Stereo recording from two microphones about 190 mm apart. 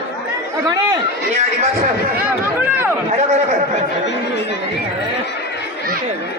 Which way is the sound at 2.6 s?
10° right (ahead or behind).